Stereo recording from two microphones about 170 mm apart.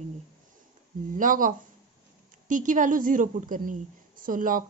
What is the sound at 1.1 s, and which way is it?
A woman's voice, 50° right (ahead or behind).